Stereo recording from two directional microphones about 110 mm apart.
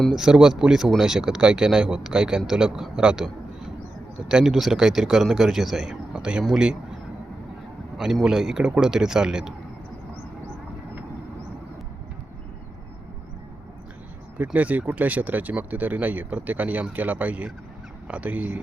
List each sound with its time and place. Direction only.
0.0 s speech: 5° right (ahead or behind)
7.9 s speech: 5° right (ahead or behind)
14.3 s speech: 15° right (ahead or behind)